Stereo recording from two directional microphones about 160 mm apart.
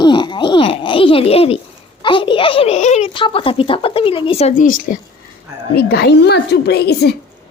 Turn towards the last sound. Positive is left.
turn(degrees=90)